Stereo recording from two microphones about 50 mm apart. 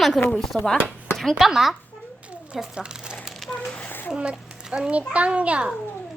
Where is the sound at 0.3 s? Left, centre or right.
Centre.